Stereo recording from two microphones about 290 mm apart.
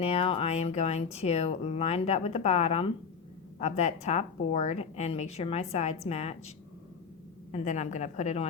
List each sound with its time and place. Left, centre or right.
0.0 s speech: centre
7.5 s speech: left